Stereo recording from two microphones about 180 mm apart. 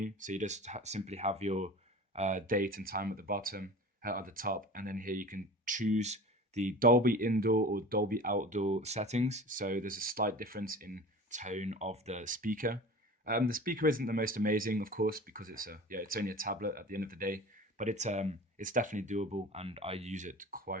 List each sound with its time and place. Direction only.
0.0 s speech: 45° right (ahead or behind)